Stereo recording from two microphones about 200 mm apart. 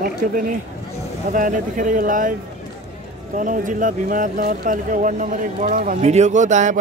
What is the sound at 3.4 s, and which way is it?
Speech, 40° right (ahead or behind).